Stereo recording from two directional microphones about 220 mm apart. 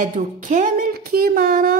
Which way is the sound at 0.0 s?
35° right (ahead or behind).